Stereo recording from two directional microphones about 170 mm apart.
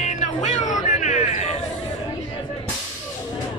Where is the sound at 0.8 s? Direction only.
45° left (ahead or behind).